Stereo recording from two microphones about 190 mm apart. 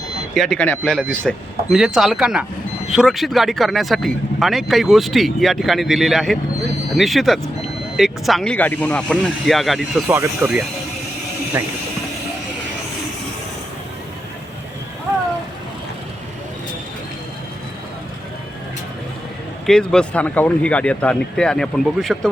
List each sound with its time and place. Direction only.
0.3 s speech: 5° left (ahead or behind)
19.6 s speech: 5° left (ahead or behind)